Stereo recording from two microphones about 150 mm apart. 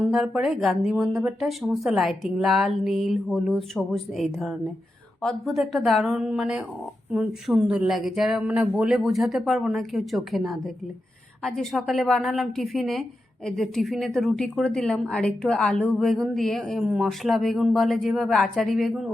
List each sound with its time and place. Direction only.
0.0 s a woman's voice: 5° right (ahead or behind)